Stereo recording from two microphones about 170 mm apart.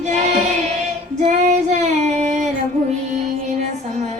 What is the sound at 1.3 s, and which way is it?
Female singing, 45° right (ahead or behind).